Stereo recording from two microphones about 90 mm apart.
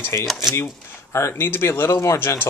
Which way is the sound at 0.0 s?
30° left (ahead or behind).